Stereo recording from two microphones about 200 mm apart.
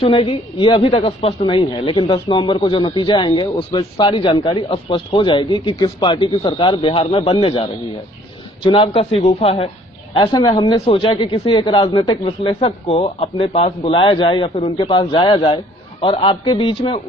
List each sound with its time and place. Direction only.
0.0 s speech: 25° left (ahead or behind)